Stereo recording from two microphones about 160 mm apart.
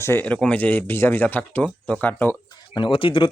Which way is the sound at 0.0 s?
15° left (ahead or behind).